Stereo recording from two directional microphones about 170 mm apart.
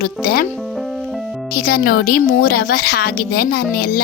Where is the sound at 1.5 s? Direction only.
65° left (ahead or behind).